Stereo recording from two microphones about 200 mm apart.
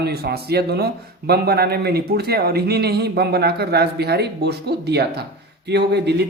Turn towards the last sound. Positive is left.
turn(degrees=-55)  # may be behind; listen again after turning